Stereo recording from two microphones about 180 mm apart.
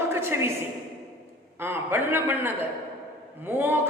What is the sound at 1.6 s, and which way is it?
Speech, 10° right (ahead or behind).